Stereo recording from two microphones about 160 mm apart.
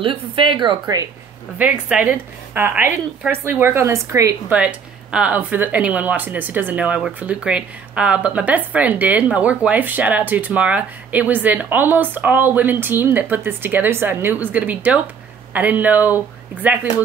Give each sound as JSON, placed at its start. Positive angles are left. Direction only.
{"t": 0.0, "sound": "speech", "side_deg": -35}
{"t": 1.6, "sound": "speech", "side_deg": -10}
{"t": 4.6, "sound": "speech", "side_deg": -5}